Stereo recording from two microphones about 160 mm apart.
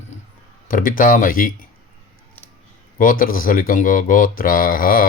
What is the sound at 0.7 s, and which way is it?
Speech, 55° left (ahead or behind).